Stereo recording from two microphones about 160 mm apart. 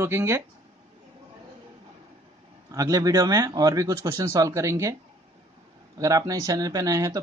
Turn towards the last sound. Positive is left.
turn(degrees=-20)  # may be behind; listen again after turning